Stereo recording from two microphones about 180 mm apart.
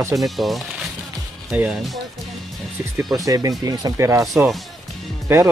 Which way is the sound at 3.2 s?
20° right (ahead or behind).